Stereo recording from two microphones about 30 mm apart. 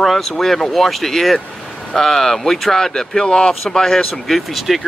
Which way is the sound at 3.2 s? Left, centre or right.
Left.